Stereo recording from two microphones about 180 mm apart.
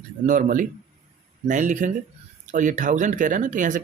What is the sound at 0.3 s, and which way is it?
Speech, 45° right (ahead or behind).